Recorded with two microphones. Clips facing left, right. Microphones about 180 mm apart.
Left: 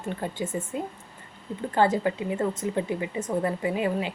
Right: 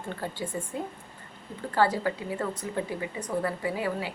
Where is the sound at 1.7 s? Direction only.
20° left (ahead or behind).